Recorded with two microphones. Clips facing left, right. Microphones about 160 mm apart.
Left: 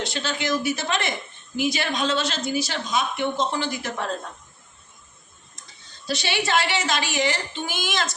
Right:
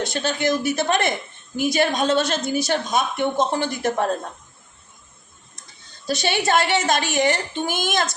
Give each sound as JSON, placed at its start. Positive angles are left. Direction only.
{"t": 0.0, "sound": "a woman's voice", "side_deg": -50}
{"t": 6.1, "sound": "a woman's voice", "side_deg": -45}